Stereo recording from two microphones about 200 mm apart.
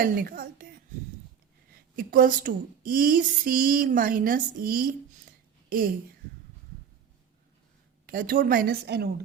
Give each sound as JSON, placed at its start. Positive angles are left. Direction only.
{"t": 0.0, "sound": "speech", "side_deg": -45}
{"t": 2.0, "sound": "speech", "side_deg": -45}
{"t": 8.0, "sound": "a woman's voice", "side_deg": -45}